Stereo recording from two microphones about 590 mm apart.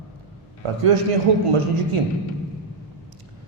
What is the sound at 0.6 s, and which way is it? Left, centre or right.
A man's voice, right.